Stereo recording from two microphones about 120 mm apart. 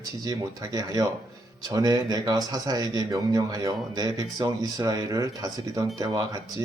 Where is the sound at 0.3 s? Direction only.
30° right (ahead or behind).